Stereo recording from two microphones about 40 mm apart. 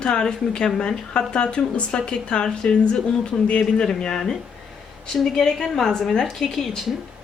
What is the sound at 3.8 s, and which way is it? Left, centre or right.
A woman's voice, centre.